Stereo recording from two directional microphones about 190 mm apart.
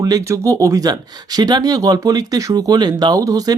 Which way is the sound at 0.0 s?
20° right (ahead or behind).